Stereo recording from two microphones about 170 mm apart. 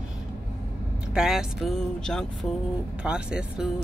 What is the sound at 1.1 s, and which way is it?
Speech, centre (ahead or behind).